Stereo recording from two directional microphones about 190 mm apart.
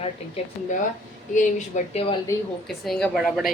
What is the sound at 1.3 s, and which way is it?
Speech, 40° left (ahead or behind).